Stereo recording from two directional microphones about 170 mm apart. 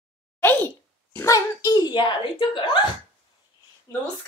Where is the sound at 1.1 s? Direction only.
15° left (ahead or behind).